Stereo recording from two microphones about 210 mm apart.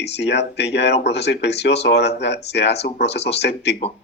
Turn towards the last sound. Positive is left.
turn(degrees=55)  # may be behind; listen again after turning